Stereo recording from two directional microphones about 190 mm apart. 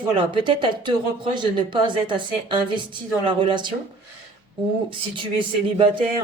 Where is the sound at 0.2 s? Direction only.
25° right (ahead or behind).